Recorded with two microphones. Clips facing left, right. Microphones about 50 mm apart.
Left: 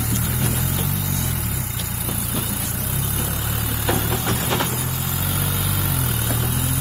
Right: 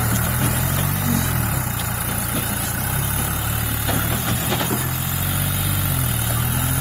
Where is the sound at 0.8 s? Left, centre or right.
Right.